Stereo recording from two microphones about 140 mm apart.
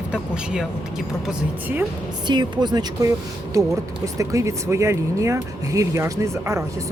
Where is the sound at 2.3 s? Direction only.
30° right (ahead or behind).